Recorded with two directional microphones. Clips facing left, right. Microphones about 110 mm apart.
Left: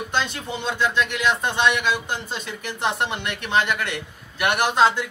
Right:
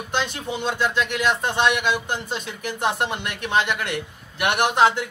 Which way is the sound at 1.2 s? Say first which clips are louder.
Right 1 dB; 10° right (ahead or behind).